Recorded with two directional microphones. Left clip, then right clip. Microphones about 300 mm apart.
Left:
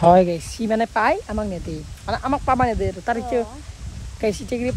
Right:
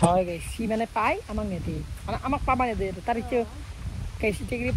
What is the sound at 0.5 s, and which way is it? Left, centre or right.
Speech, centre.